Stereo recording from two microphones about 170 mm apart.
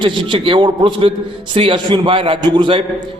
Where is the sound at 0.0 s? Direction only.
30° right (ahead or behind).